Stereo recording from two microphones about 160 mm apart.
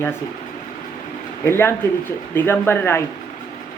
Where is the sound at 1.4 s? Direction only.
15° left (ahead or behind).